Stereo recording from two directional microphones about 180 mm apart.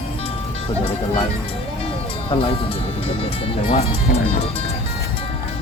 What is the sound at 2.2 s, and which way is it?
Speech, 30° left (ahead or behind).